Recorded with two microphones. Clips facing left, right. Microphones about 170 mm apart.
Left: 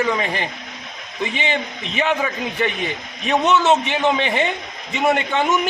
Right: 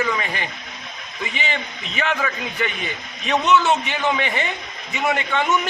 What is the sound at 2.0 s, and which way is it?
A man's voice, 20° left (ahead or behind).